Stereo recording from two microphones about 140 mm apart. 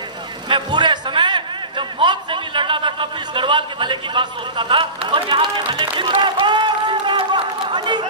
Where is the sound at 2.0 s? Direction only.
35° right (ahead or behind).